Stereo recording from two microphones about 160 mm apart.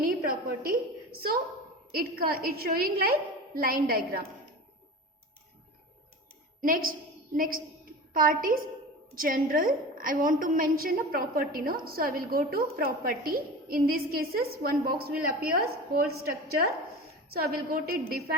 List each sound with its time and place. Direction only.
0.0 s a woman's voice: 65° right (ahead or behind)
6.6 s a woman's voice: 60° right (ahead or behind); by 18.2 s 75° right (ahead or behind)